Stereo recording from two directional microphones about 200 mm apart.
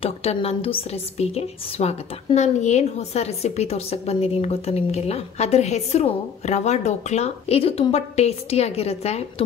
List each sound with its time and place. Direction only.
0.0 s a woman's voice: 30° left (ahead or behind)